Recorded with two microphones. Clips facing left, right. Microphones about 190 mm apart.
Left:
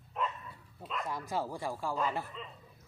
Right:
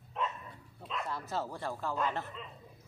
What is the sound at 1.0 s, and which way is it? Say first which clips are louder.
Speech: left 2 dB; 15° left (ahead or behind).